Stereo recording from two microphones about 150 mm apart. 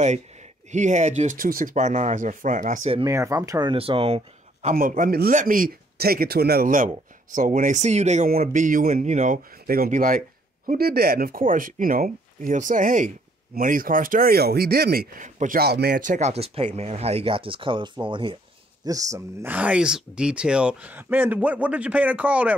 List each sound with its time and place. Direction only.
0.7 s speech: 50° right (ahead or behind)
3.1 s speech: 20° right (ahead or behind)
3.7 s speech: 40° right (ahead or behind)
4.7 s speech: 65° right (ahead or behind); by 8.3 s 50° right (ahead or behind)
8.3 s speech: 65° right (ahead or behind)
10.7 s speech: 90° right
15.2 s speech: 60° right (ahead or behind); by 18.4 s 35° right (ahead or behind)
18.9 s speech: 20° right (ahead or behind)